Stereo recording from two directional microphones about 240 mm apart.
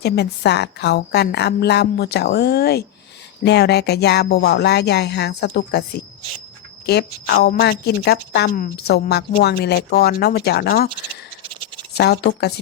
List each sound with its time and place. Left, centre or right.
0.0 s a woman's voice: left
11.9 s a woman's voice: left